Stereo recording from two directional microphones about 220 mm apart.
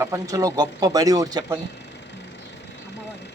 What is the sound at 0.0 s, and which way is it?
Speech, 15° right (ahead or behind).